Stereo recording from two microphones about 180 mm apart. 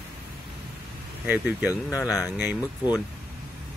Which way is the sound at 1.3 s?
10° right (ahead or behind).